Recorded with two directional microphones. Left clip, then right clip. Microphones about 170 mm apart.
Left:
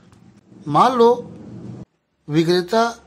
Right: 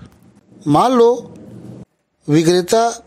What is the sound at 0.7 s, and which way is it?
Speech, 50° right (ahead or behind).